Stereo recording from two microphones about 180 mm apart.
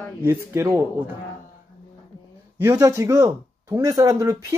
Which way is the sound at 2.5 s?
15° right (ahead or behind).